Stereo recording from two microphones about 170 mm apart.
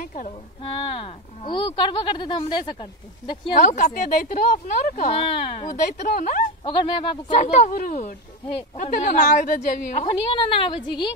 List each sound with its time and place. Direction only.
0.0 s speech: 50° left (ahead or behind)
0.6 s speech: 30° left (ahead or behind)
3.5 s speech: 50° left (ahead or behind)
5.3 s speech: 35° left (ahead or behind)
5.7 s speech: 50° left (ahead or behind)
6.6 s speech: 35° left (ahead or behind)
10.0 s speech: 30° left (ahead or behind)